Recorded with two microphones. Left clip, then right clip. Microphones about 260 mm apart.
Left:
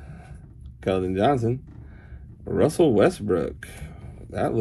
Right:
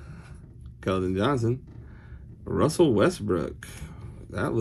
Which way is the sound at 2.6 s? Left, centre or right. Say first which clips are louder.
Left 3 dB; centre.